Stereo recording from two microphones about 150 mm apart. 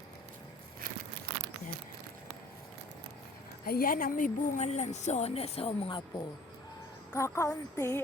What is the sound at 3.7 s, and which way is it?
Speech, 75° left (ahead or behind).